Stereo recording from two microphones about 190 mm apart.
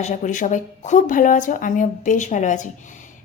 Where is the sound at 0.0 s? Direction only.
40° left (ahead or behind).